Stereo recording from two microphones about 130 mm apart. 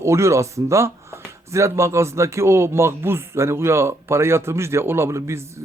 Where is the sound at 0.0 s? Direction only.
20° right (ahead or behind).